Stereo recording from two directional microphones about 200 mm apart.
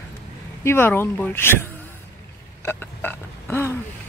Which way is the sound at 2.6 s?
10° left (ahead or behind).